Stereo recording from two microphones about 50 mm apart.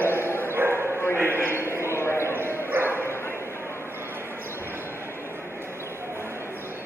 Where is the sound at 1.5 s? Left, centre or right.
Left.